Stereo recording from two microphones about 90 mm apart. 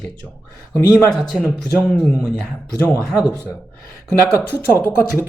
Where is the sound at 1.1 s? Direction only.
Centre (ahead or behind).